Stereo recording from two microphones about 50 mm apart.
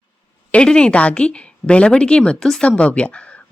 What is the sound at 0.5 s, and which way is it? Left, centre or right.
Speech, centre.